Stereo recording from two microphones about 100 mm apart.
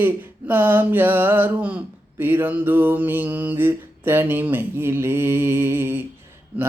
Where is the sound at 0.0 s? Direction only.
20° right (ahead or behind).